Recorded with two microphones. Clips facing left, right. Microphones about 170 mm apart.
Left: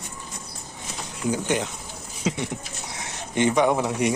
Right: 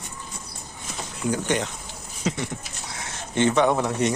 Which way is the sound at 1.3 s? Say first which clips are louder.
Even; 5° left (ahead or behind).